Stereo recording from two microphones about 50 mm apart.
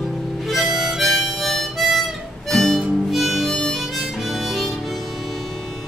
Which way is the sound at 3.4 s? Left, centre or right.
Centre.